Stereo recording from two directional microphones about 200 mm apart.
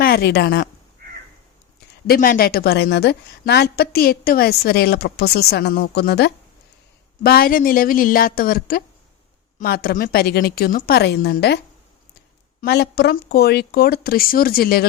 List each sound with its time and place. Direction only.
0.0 s speech: 50° left (ahead or behind)
2.0 s a woman's voice: 45° left (ahead or behind)
12.6 s a woman's voice: 55° left (ahead or behind)